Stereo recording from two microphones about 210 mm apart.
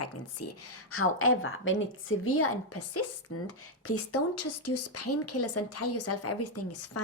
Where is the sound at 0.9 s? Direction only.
80° left.